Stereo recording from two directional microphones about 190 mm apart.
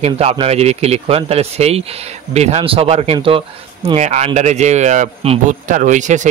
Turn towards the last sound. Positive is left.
turn(degrees=-40)  # may be behind; listen again after turning